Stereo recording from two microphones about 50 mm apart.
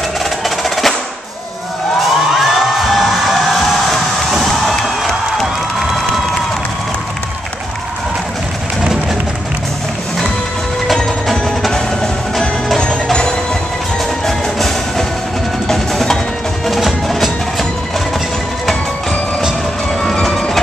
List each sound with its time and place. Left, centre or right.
0.7 s percussion: centre
2.0 s music: centre
11.7 s music: centre
15.7 s percussion: centre
16.6 s music: centre
20.1 s train: centre